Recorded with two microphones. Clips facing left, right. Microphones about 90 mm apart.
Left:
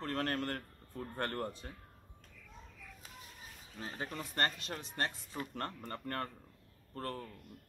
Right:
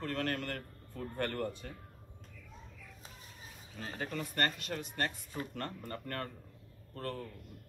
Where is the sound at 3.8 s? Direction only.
20° left (ahead or behind).